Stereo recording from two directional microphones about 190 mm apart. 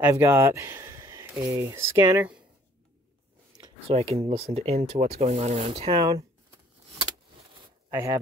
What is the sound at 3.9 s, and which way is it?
Speech, 30° right (ahead or behind).